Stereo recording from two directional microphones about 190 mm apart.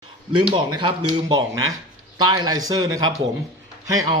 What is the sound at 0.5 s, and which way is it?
Speech, 25° right (ahead or behind).